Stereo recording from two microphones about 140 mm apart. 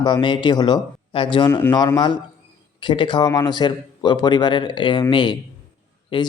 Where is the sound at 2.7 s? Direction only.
35° left (ahead or behind).